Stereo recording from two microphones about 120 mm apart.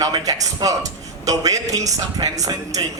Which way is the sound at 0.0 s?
30° right (ahead or behind).